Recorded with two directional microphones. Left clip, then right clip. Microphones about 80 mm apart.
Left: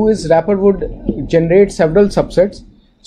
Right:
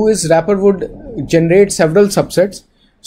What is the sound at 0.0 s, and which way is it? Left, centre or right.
Speech, right.